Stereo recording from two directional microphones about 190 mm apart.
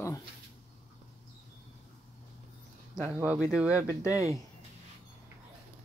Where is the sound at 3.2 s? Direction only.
10° right (ahead or behind).